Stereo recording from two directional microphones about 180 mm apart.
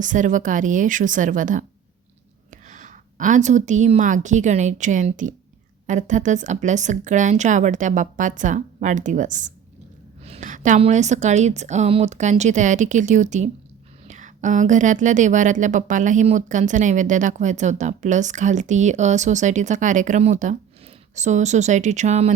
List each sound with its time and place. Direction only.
0.0 s a woman's voice: 45° right (ahead or behind)